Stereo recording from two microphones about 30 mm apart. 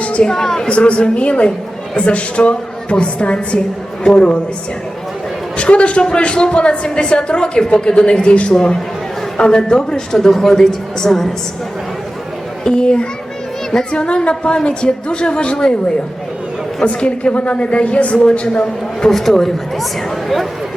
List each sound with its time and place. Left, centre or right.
0.2 s a woman's voice: centre
0.7 s a woman's voice: left
5.5 s a woman's voice: left
8.5 s speech: left
10.2 s a woman's voice: centre
12.6 s a woman's voice: left
16.8 s a woman's voice: left
19.1 s speech: centre